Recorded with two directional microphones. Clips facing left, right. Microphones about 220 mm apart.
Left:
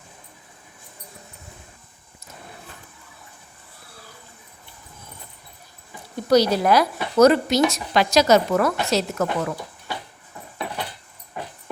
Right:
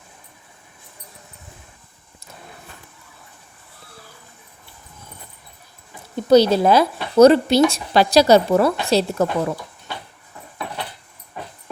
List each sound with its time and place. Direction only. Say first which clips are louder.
6.2 s speech: right 4 dB; 25° right (ahead or behind)